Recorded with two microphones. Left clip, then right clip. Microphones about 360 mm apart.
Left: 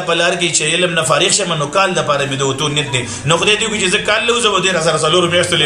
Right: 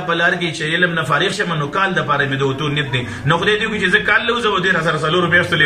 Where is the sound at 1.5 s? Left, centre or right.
Centre.